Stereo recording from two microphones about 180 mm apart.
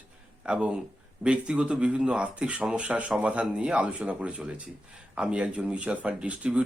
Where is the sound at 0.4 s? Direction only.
5° right (ahead or behind).